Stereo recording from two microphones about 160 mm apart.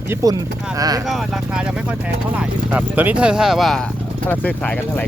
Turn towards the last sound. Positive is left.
turn(degrees=0)  # may be behind; listen again after turning